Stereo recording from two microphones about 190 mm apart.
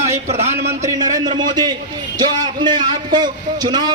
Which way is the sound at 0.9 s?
20° right (ahead or behind).